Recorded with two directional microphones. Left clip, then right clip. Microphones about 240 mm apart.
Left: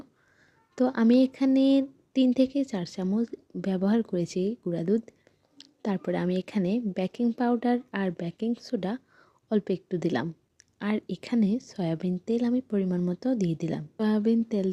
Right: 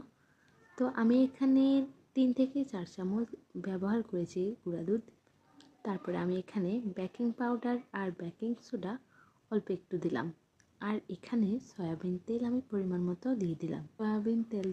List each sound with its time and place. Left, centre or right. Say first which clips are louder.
0.8 s speech: left 7 dB; left